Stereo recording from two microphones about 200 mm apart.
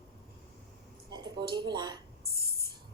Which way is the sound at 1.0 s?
20° right (ahead or behind).